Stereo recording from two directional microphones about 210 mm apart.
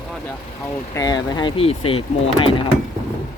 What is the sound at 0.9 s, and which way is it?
Speech, 20° left (ahead or behind).